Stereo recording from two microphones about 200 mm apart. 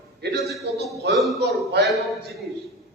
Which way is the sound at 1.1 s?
Centre (ahead or behind).